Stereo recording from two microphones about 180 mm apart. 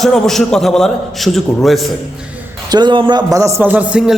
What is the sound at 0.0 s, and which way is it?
A man's voice, centre (ahead or behind).